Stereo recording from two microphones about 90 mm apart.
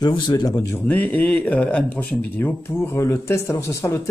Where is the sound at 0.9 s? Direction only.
20° left (ahead or behind).